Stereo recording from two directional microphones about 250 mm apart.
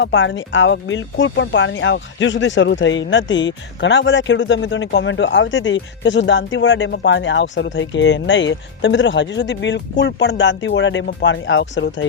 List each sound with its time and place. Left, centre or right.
0.0 s speech: left